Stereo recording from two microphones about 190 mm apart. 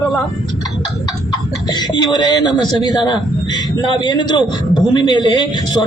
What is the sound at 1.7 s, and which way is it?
A man's voice, 20° left (ahead or behind).